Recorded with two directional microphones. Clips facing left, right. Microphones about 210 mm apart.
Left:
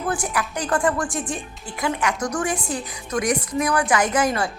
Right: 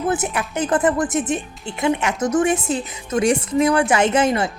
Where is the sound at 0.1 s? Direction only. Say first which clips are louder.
Right 3 dB; 25° right (ahead or behind).